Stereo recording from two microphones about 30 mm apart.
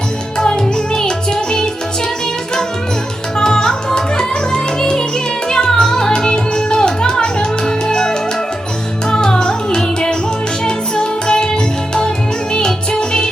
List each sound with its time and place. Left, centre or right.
0.3 s music: left
3.3 s music: left